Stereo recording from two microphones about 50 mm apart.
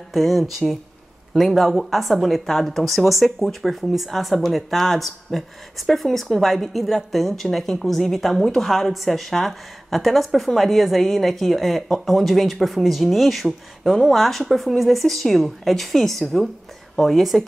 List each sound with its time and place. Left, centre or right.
0.1 s a woman's voice: centre